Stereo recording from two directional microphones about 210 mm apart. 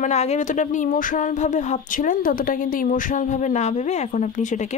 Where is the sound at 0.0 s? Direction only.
30° left (ahead or behind).